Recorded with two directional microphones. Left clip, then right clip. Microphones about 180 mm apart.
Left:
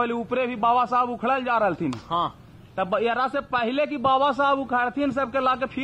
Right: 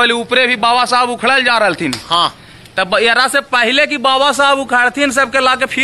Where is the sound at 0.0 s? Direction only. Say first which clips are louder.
Right 13 dB; 5° right (ahead or behind).